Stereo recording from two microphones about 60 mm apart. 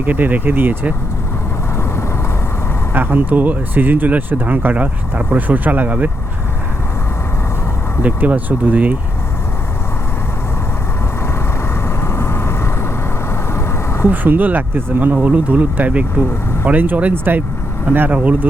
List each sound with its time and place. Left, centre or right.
0.0 s speech: right
2.9 s speech: right
8.0 s speech: right
11.7 s vehicle: left
14.1 s speech: right
15.1 s speech: right